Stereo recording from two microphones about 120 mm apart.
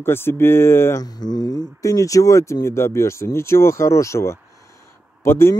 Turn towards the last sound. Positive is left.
turn(degrees=20)  # may be behind; listen again after turning